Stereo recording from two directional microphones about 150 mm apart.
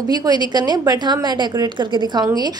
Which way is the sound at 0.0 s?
25° right (ahead or behind).